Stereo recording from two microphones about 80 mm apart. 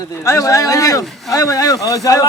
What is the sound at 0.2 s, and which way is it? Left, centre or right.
A man's voice, left.